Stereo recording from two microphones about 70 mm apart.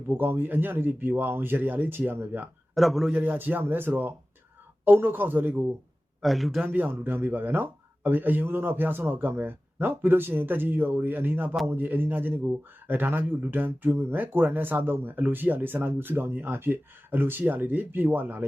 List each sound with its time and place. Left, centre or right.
0.1 s a man's voice: right
2.7 s speech: centre
3.1 s a man's voice: right
6.2 s speech: centre
6.7 s a man's voice: right